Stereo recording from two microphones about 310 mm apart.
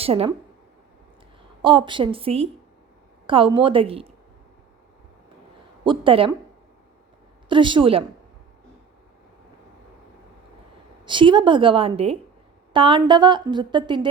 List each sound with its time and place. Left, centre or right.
0.0 s a woman's voice: centre
1.6 s a woman's voice: centre
5.8 s a woman's voice: centre
7.4 s a woman's voice: centre
11.0 s a woman's voice: centre